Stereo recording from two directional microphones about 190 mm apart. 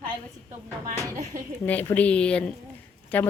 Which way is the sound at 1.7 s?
10° left (ahead or behind).